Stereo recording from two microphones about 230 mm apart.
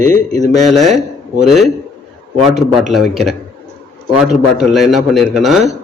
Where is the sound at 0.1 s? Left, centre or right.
Centre.